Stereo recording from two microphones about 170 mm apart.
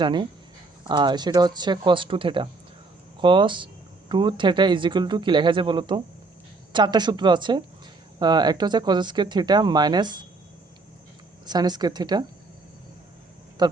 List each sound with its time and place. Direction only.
0.0 s speech: 25° right (ahead or behind)
11.4 s speech: 25° right (ahead or behind)
13.6 s speech: 25° right (ahead or behind)